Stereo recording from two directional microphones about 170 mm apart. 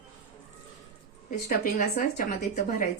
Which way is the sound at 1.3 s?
55° left (ahead or behind).